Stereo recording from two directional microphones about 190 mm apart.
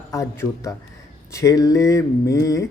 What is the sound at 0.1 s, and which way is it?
Speech, 15° left (ahead or behind).